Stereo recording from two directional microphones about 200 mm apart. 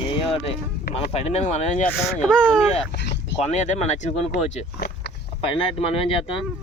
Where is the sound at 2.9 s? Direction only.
60° left (ahead or behind).